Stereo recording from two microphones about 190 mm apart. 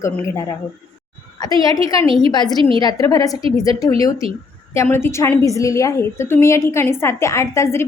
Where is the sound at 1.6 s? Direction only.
20° left (ahead or behind).